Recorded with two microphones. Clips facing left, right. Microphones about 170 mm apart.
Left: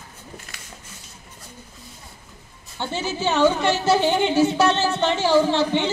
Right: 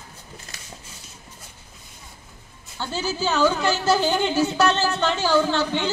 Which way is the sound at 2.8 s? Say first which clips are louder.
Left 1 dB; 25° left (ahead or behind).